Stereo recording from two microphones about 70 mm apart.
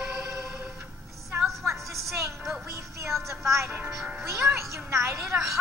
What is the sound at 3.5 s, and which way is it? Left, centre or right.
Music, right.